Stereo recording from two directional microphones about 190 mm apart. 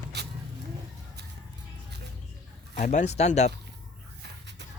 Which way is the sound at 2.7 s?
40° left (ahead or behind).